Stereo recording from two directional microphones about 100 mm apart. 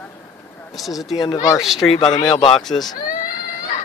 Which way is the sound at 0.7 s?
Centre (ahead or behind).